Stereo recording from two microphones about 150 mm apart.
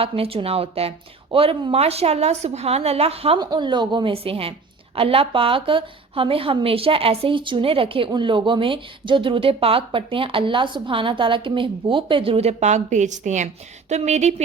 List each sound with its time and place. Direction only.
0.0 s a woman's voice: 40° right (ahead or behind)
3.4 s a woman's voice: 30° right (ahead or behind); by 14.4 s 50° right (ahead or behind)